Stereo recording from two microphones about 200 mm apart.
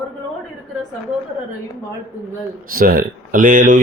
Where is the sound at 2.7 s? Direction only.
45° right (ahead or behind).